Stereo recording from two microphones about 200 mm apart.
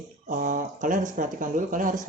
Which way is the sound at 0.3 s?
40° right (ahead or behind).